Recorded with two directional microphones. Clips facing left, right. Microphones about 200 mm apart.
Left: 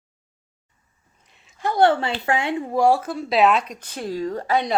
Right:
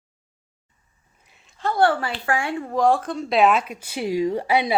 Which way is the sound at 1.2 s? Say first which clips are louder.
Even; centre (ahead or behind).